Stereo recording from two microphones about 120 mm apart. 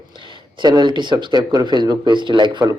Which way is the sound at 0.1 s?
40° right (ahead or behind).